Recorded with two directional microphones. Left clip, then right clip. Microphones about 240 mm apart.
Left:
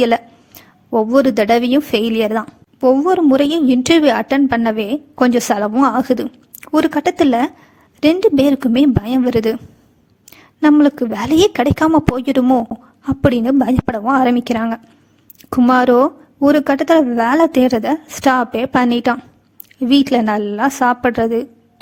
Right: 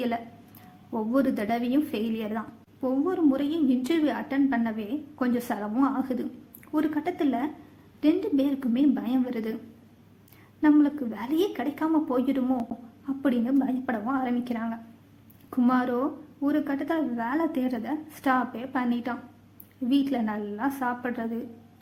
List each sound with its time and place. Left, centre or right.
0.9 s a woman's voice: left
10.6 s a woman's voice: left